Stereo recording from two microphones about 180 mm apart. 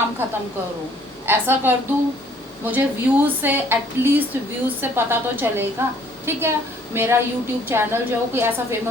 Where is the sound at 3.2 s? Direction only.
10° right (ahead or behind).